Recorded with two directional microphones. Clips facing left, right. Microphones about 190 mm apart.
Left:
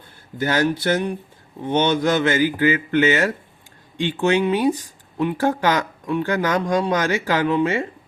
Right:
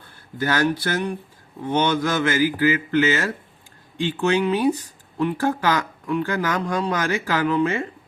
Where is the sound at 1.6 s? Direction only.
25° left (ahead or behind).